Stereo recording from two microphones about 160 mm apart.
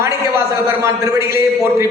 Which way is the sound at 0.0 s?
20° right (ahead or behind).